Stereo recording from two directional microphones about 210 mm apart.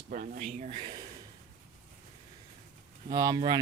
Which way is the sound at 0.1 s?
40° right (ahead or behind).